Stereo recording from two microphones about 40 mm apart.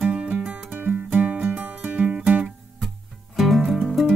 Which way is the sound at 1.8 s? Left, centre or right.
Right.